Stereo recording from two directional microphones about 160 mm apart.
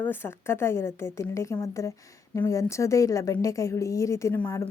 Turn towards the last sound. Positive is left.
turn(degrees=15)  # may be behind; listen again after turning